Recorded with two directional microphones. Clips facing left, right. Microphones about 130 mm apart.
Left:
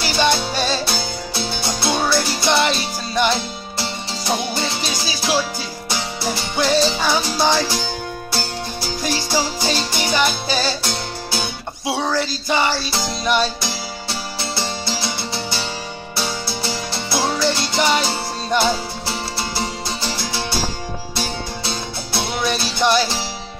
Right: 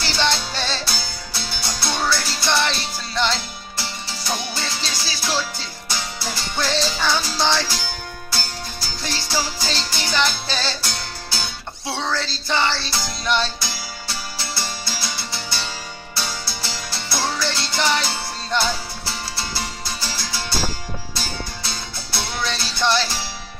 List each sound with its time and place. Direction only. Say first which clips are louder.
0.0 s music: left 4 dB; 15° left (ahead or behind)
1.3 s music: left 5 dB; 25° left (ahead or behind)
21.6 s music: left 6 dB; 20° left (ahead or behind)